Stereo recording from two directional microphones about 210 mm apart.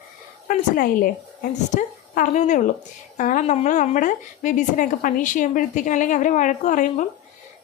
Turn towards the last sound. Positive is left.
turn(degrees=35)  # may be behind; listen again after turning